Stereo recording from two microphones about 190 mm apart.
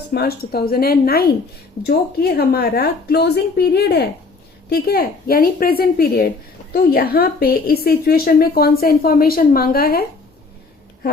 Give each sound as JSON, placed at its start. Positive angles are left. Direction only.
{"t": 0.1, "sound": "a woman's voice", "side_deg": 55}